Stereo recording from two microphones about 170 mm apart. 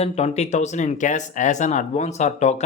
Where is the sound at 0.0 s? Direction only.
40° left (ahead or behind).